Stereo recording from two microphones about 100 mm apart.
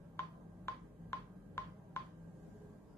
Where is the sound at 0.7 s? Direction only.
30° left (ahead or behind).